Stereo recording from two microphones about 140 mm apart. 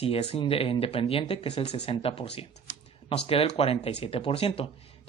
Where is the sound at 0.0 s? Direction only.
45° left (ahead or behind).